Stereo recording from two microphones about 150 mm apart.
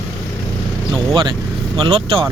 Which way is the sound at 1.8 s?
35° right (ahead or behind).